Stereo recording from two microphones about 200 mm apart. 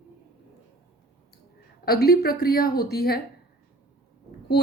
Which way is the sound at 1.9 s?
50° left (ahead or behind).